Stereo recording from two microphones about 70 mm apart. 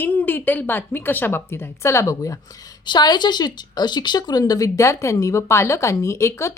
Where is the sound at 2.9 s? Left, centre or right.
Left.